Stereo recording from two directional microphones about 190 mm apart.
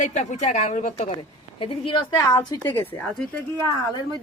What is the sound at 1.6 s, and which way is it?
A woman's voice, 25° left (ahead or behind).